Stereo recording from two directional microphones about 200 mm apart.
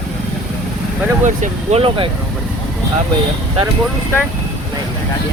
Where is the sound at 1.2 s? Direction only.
35° right (ahead or behind).